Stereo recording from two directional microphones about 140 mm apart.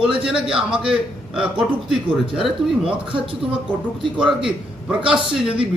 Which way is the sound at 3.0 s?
40° right (ahead or behind).